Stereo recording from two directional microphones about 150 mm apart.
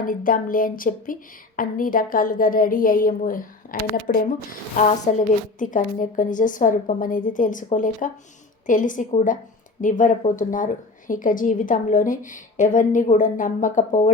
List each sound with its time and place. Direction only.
0.0 s speech: 65° left (ahead or behind)